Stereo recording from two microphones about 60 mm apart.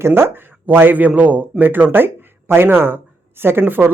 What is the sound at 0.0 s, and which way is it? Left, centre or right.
Speech, right.